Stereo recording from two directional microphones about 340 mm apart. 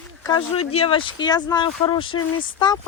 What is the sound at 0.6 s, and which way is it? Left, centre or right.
Speech, left.